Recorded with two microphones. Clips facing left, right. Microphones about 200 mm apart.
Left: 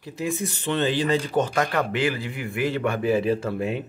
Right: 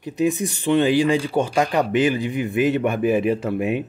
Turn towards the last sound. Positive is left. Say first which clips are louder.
# right 4 dB
turn(degrees=-20)  # may be behind; listen again after turning